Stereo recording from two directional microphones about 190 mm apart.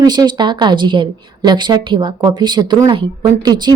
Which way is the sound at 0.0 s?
20° right (ahead or behind).